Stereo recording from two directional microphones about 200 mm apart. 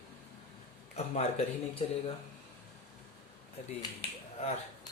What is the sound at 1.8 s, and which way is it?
Speech, 30° left (ahead or behind).